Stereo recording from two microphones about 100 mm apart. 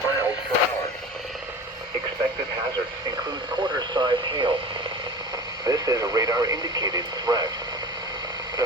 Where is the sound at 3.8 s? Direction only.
50° right (ahead or behind).